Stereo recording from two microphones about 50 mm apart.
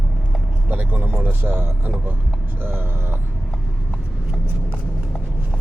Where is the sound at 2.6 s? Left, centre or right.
Right.